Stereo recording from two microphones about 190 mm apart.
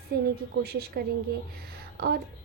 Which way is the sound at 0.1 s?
55° right (ahead or behind).